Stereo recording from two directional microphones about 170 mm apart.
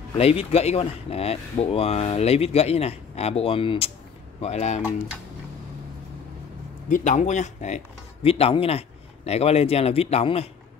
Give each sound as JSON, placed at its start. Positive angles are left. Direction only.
{"t": 0.2, "sound": "speech", "side_deg": 35}
{"t": 6.9, "sound": "speech", "side_deg": 45}